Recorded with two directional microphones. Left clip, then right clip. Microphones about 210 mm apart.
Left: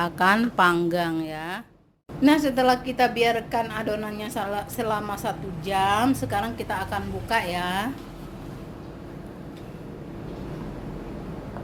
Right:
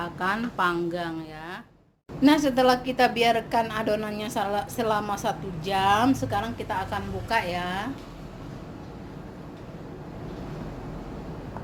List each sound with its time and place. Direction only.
0.0 s a woman's voice: 30° left (ahead or behind)
2.2 s a woman's voice: 5° right (ahead or behind)
7.5 s a woman's voice: 25° left (ahead or behind)